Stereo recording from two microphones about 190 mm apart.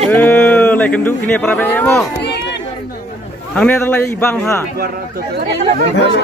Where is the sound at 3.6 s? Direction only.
10° left (ahead or behind).